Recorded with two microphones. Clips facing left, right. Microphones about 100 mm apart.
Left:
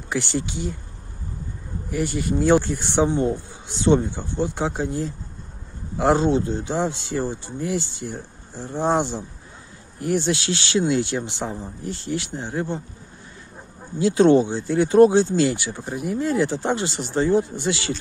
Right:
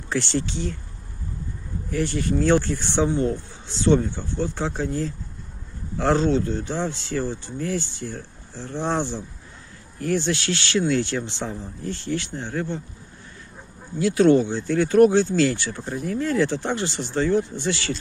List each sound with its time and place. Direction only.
0.1 s speech: 10° left (ahead or behind)
1.9 s speech: 10° left (ahead or behind)
13.9 s speech: 25° left (ahead or behind)